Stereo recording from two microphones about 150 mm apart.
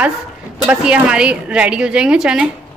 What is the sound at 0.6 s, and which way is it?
A woman's voice, 5° right (ahead or behind).